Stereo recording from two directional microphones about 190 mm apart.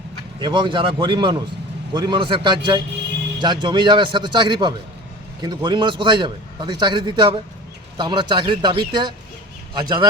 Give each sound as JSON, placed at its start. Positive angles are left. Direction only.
{"t": 0.3, "sound": "a man's voice", "side_deg": -25}